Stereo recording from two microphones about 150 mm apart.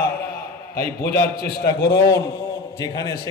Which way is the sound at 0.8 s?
90° left.